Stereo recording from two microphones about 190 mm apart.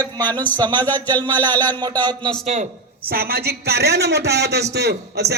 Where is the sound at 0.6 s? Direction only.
25° right (ahead or behind).